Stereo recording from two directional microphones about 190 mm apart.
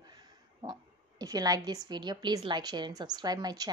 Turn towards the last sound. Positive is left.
turn(degrees=-20)  # may be behind; listen again after turning